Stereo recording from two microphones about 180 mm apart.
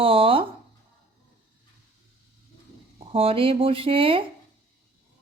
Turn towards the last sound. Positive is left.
turn(degrees=-30)  # may be behind; listen again after turning